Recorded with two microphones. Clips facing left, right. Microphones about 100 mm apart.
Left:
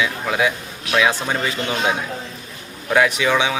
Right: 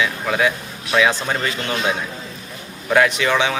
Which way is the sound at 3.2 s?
10° left (ahead or behind).